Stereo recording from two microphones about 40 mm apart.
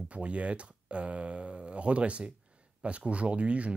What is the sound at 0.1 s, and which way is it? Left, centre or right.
Speech, right.